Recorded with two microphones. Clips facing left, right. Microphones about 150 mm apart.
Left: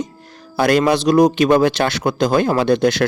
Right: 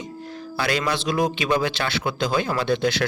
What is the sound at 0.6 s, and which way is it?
A man's voice, 50° left (ahead or behind).